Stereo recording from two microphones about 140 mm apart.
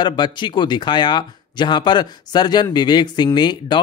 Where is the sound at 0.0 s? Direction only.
30° left (ahead or behind).